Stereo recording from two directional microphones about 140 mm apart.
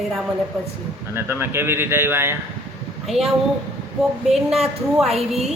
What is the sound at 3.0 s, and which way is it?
Speech, centre (ahead or behind).